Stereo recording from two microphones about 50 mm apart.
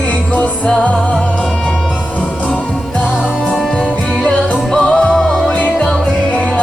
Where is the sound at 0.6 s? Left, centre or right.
Left.